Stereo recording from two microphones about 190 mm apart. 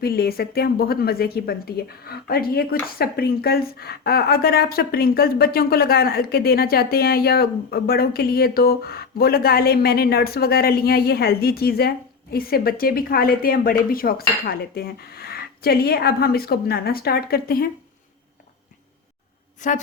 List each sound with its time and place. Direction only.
0.0 s speech: 55° left (ahead or behind)
19.6 s a woman's voice: 40° left (ahead or behind)